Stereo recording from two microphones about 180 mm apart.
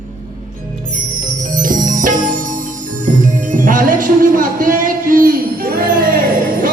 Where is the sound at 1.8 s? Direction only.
45° right (ahead or behind).